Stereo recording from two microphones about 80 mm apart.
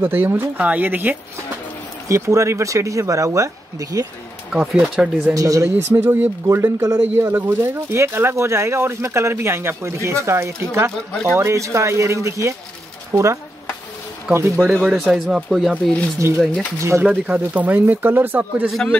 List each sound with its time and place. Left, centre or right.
0.0 s speech: right
2.0 s speech: right
4.5 s speech: centre
5.3 s speech: right
6.4 s speech: right
7.0 s speech: right
14.7 s speech: centre
16.2 s speech: right
17.0 s speech: centre